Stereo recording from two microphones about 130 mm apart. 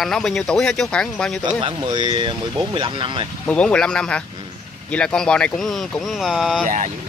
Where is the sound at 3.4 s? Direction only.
10° left (ahead or behind).